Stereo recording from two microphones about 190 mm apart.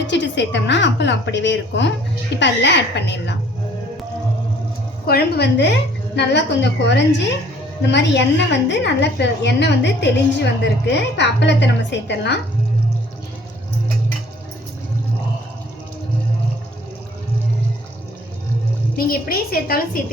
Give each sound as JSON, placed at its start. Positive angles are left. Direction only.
{"t": 0.1, "sound": "a woman's voice", "side_deg": 70}
{"t": 5.0, "sound": "a woman's voice", "side_deg": 60}
{"t": 18.9, "sound": "a woman's voice", "side_deg": 50}